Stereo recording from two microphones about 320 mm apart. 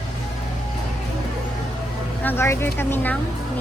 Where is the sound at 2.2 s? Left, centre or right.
Centre.